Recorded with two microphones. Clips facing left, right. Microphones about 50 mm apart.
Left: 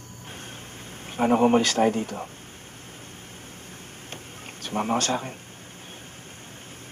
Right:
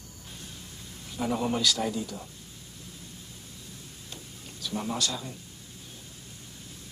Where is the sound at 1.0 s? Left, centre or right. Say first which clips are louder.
Left 9 dB; left.